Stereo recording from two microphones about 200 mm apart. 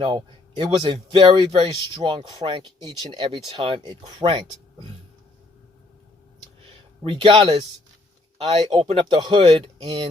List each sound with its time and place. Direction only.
0.0 s speech: 25° right (ahead or behind)
7.0 s speech: 25° right (ahead or behind)